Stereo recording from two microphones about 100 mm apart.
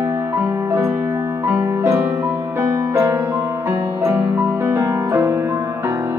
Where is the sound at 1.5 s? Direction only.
20° right (ahead or behind).